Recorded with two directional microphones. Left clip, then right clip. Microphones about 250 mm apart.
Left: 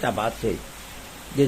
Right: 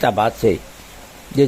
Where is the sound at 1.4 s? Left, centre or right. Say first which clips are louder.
Right 6 dB; right.